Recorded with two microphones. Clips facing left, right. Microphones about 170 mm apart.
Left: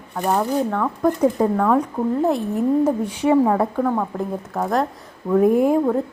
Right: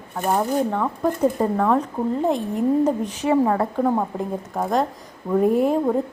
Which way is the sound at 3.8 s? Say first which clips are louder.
Even; 15° right (ahead or behind).